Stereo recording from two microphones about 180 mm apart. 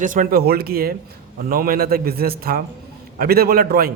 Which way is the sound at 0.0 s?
45° right (ahead or behind).